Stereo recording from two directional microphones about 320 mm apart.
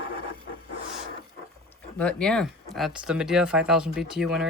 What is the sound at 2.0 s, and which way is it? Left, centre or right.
Speech, centre.